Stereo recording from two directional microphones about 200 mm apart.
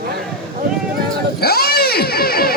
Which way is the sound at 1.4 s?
50° left (ahead or behind).